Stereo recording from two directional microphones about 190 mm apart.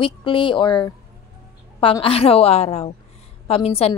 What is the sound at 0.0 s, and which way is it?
A woman's voice, 25° left (ahead or behind).